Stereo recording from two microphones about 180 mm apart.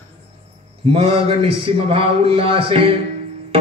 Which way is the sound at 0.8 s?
30° right (ahead or behind).